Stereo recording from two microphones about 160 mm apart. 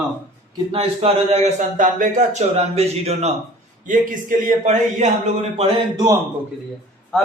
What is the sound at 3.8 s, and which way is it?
A man's voice, 55° right (ahead or behind).